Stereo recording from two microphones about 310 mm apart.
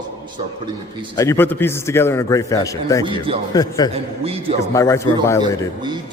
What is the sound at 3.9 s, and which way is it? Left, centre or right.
Speech, centre.